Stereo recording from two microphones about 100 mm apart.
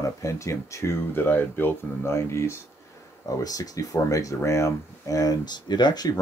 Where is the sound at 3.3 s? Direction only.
40° left (ahead or behind).